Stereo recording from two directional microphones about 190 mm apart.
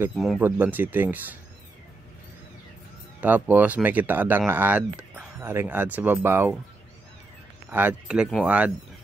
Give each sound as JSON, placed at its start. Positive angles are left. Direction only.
{"t": 0.1, "sound": "speech", "side_deg": 0}
{"t": 3.2, "sound": "speech", "side_deg": -10}
{"t": 7.7, "sound": "speech", "side_deg": -10}